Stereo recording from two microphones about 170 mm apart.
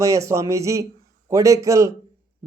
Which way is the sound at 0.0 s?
20° right (ahead or behind).